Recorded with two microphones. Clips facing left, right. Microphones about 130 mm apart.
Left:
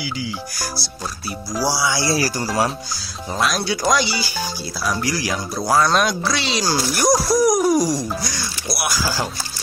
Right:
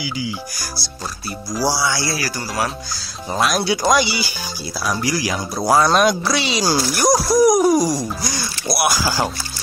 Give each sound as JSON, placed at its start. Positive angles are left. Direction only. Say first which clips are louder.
{"t": 1.6, "sound": "speech", "louder": "right 1 dB", "side_deg": 5}
{"t": 2.0, "sound": "speech", "louder": "left 4 dB", "side_deg": 35}
{"t": 3.3, "sound": "speech", "louder": "right 3 dB", "side_deg": -5}